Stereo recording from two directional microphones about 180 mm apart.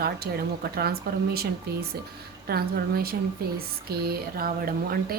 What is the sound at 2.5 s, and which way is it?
Speech, 55° right (ahead or behind).